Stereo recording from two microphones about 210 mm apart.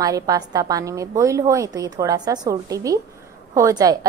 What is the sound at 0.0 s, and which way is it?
A woman's voice, 20° right (ahead or behind).